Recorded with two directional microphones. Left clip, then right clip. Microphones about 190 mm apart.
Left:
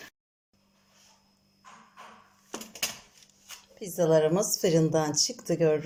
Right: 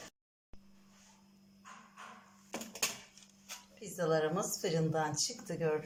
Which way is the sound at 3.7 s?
35° left (ahead or behind).